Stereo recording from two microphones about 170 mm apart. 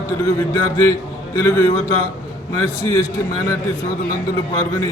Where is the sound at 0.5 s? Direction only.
20° left (ahead or behind).